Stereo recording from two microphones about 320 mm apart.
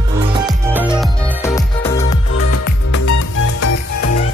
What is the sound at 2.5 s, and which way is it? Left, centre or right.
Music, left.